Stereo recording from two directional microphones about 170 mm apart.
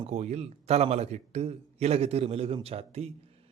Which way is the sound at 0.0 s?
40° right (ahead or behind).